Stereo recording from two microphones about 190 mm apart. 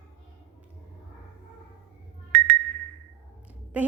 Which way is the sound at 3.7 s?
10° right (ahead or behind).